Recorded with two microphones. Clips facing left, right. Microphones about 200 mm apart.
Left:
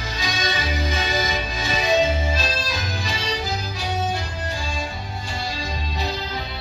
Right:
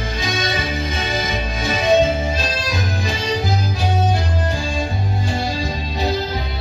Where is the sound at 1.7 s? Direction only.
50° right (ahead or behind).